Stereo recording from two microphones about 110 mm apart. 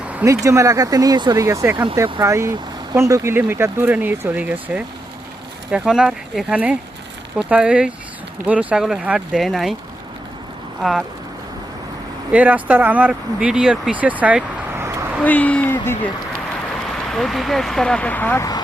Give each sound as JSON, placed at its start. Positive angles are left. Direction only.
{"t": 0.3, "sound": "speech", "side_deg": -25}
{"t": 12.3, "sound": "speech", "side_deg": -15}
{"t": 15.2, "sound": "speech", "side_deg": 15}
{"t": 17.1, "sound": "speech", "side_deg": 0}